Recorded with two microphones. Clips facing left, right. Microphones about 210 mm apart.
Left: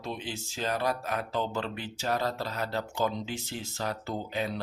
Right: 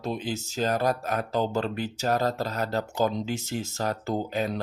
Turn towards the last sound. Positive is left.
turn(degrees=-45)  # may be behind; listen again after turning